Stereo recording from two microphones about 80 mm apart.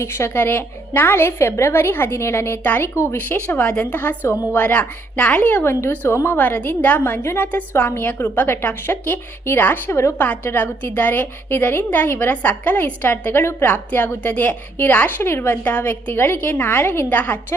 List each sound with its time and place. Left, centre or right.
0.0 s a woman's voice: left
10.2 s a woman's voice: left